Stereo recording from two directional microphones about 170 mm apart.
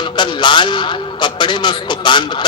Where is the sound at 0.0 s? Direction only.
30° left (ahead or behind).